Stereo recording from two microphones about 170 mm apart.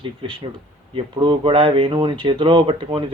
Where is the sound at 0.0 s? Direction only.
30° right (ahead or behind).